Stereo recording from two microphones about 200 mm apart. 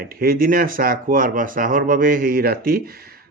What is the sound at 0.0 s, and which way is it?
Speech, 45° right (ahead or behind).